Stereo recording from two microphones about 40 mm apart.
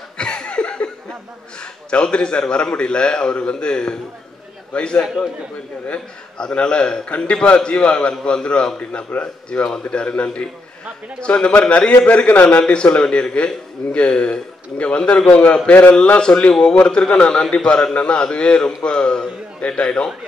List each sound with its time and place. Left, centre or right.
0.2 s a sound: left
1.6 s a man's voice: left
5.0 s a man's voice: centre
5.9 s a man's voice: left
9.5 s a man's voice: left